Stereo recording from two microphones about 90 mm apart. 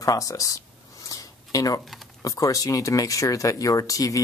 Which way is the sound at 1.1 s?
40° left (ahead or behind).